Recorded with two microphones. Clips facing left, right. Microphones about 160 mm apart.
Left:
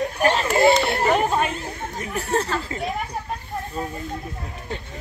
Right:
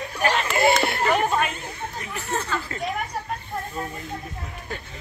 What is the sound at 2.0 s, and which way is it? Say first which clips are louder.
Chatter: left 6 dB; 35° left (ahead or behind).